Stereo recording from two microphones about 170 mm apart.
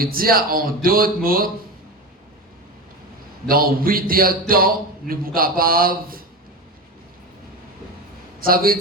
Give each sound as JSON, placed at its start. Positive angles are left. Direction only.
{"t": 0.0, "sound": "a man's voice", "side_deg": -60}
{"t": 3.4, "sound": "a man's voice", "side_deg": -60}
{"t": 8.4, "sound": "a man's voice", "side_deg": -60}